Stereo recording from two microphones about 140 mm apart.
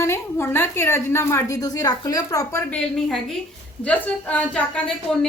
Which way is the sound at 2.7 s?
5° left (ahead or behind).